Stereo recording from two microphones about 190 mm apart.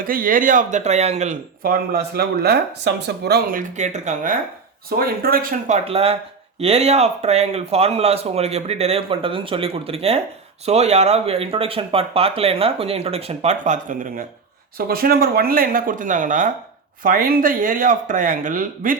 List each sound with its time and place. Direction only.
0.0 s speech: 50° right (ahead or behind)
1.6 s speech: 50° right (ahead or behind)
3.6 s speech: 40° right (ahead or behind)
14.8 s speech: 50° right (ahead or behind)